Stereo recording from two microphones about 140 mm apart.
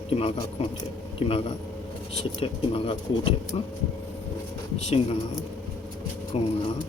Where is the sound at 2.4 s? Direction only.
40° left (ahead or behind).